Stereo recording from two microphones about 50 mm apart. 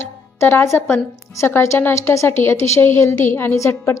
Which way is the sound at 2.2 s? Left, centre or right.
Left.